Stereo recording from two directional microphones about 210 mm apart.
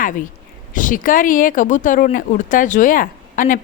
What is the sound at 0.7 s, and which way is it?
Speech, 40° left (ahead or behind).